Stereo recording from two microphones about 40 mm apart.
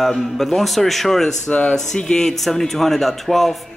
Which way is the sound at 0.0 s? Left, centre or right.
Centre.